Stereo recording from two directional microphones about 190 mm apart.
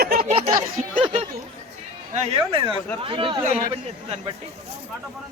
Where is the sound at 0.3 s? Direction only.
35° right (ahead or behind).